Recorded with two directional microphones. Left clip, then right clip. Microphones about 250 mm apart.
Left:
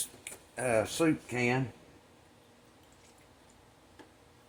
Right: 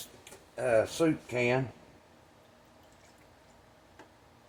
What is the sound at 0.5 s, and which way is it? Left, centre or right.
Speech, left.